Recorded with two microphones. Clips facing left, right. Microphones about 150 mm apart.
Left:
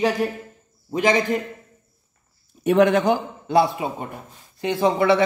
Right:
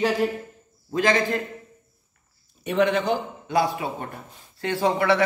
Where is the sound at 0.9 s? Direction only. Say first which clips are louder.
Left 2 dB; 20° left (ahead or behind).